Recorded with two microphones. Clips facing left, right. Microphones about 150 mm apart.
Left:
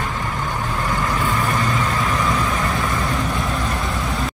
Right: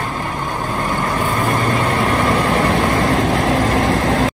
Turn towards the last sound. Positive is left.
turn(degrees=-90)